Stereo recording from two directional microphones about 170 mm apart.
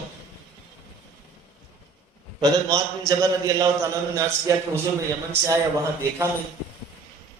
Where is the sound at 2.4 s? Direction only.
20° right (ahead or behind).